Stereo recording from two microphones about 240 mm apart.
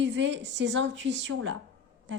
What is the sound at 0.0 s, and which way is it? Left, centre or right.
A woman's voice, right.